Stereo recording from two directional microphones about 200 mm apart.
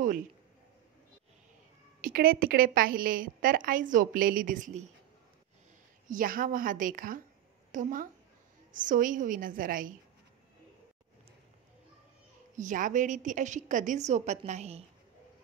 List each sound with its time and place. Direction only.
2.0 s a woman's voice: 45° right (ahead or behind)
6.0 s a woman's voice: 45° right (ahead or behind)
12.5 s a woman's voice: 40° right (ahead or behind)